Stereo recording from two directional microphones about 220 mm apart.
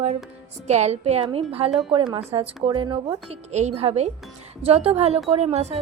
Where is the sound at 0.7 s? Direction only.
30° right (ahead or behind).